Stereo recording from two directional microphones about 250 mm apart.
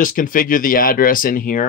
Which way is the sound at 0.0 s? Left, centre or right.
Left.